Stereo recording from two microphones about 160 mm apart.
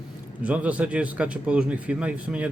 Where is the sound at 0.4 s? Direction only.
10° right (ahead or behind).